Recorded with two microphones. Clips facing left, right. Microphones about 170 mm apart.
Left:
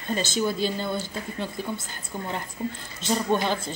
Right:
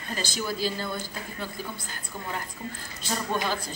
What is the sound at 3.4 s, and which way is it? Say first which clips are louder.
Speech: left 3 dB; 25° left (ahead or behind).